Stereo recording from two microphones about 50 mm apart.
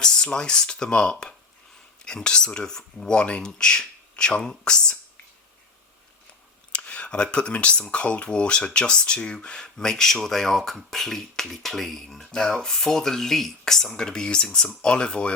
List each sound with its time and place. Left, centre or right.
0.0 s speech: centre
6.7 s speech: left